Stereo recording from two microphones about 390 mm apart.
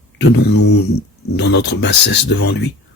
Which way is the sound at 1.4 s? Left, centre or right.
Left.